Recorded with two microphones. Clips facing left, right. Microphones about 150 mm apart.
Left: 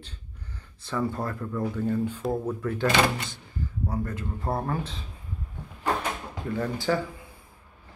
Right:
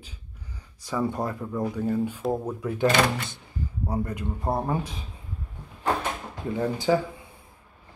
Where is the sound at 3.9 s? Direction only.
15° right (ahead or behind).